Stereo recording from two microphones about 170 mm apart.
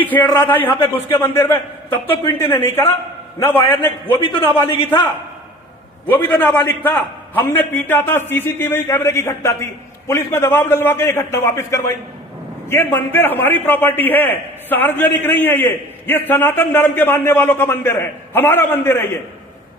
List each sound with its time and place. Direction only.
0.0 s a man's voice: 10° left (ahead or behind)
4.2 s a man's voice: 30° left (ahead or behind)
6.1 s a man's voice: 10° left (ahead or behind)